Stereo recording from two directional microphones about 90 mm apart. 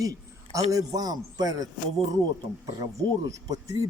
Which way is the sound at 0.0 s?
40° right (ahead or behind).